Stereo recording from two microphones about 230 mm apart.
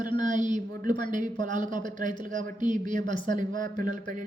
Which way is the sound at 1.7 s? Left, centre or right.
Right.